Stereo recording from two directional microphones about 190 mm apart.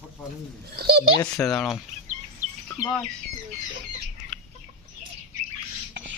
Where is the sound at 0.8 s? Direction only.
55° right (ahead or behind).